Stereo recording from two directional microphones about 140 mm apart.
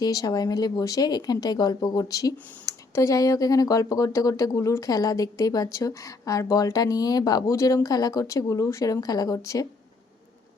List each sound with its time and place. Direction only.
0.0 s speech: 25° left (ahead or behind)